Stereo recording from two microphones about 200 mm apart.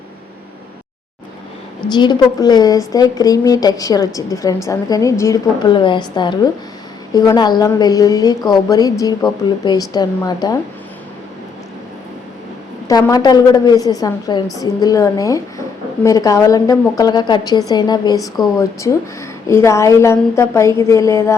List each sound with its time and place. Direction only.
1.9 s a woman's voice: 20° left (ahead or behind)
12.9 s a woman's voice: 20° left (ahead or behind)
19.5 s a woman's voice: 15° left (ahead or behind)